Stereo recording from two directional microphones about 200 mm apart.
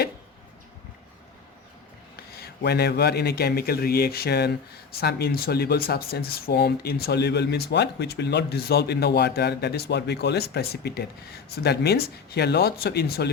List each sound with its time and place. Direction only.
2.1 s speech: 55° left (ahead or behind)